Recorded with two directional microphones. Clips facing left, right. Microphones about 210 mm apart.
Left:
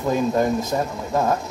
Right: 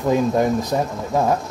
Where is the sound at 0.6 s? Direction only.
15° right (ahead or behind).